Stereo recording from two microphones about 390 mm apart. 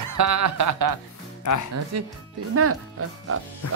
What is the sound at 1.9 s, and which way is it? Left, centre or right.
Speech, right.